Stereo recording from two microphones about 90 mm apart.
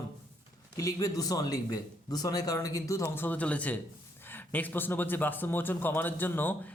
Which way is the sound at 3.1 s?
20° left (ahead or behind).